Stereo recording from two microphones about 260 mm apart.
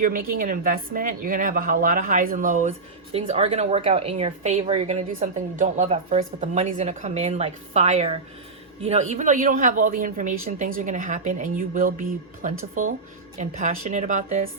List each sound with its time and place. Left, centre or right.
0.0 s a woman's voice: right